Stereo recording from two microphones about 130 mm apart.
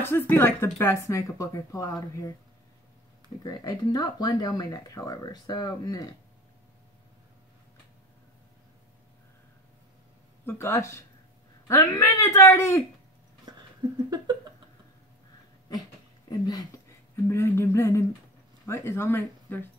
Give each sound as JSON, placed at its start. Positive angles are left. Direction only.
{"t": 0.0, "sound": "speech", "side_deg": 15}
{"t": 3.4, "sound": "speech", "side_deg": 30}
{"t": 10.4, "sound": "speech", "side_deg": 20}
{"t": 16.3, "sound": "speech", "side_deg": 30}